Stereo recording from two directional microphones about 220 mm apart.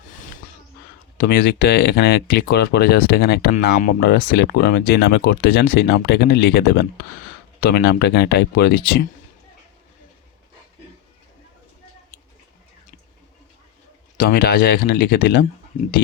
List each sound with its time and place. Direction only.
1.2 s speech: 40° left (ahead or behind)
14.2 s speech: 45° left (ahead or behind)